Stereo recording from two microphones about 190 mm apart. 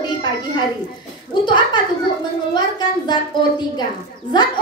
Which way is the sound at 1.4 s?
25° left (ahead or behind).